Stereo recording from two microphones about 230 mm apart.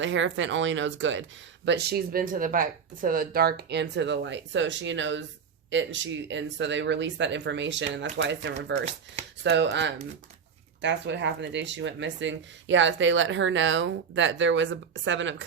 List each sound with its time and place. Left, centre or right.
0.0 s speech: right